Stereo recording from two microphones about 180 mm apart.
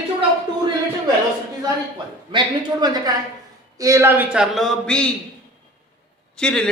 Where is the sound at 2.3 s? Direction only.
25° right (ahead or behind); by 5.1 s 5° left (ahead or behind).